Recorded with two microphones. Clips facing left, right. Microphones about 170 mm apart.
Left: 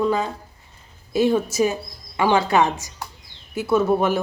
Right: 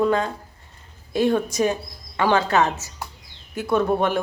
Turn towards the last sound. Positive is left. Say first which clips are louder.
# left 2 dB
turn(degrees=5)  # may be behind; listen again after turning